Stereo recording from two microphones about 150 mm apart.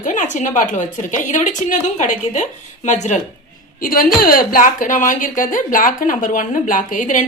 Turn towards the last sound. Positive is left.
turn(degrees=55)  # may be behind; listen again after turning